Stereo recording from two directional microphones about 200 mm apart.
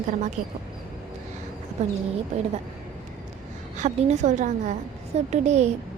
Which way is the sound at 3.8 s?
35° right (ahead or behind).